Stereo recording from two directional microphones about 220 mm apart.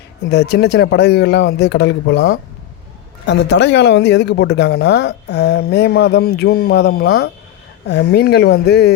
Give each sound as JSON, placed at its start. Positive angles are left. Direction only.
{"t": 0.3, "sound": "speech", "side_deg": 50}